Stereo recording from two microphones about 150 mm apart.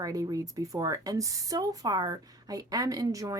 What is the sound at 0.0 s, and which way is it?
Speech, 25° right (ahead or behind).